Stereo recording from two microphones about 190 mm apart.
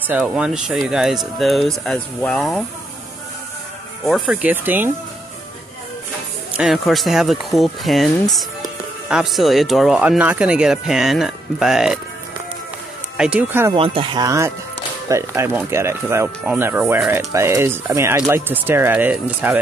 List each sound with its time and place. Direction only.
0.1 s speech: 5° right (ahead or behind)
4.0 s speech: 5° right (ahead or behind)
6.5 s speech: centre (ahead or behind)
13.2 s speech: 5° right (ahead or behind)
13.7 s speech: 30° right (ahead or behind); by 19.6 s 10° right (ahead or behind)